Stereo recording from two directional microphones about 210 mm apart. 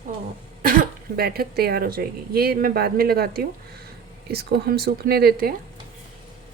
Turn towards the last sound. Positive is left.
turn(degrees=-45)  # may be behind; listen again after turning